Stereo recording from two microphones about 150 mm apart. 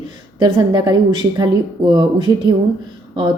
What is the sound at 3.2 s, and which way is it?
Speech, 30° right (ahead or behind).